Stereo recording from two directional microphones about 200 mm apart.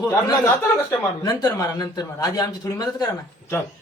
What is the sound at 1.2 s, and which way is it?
Speech, 20° left (ahead or behind).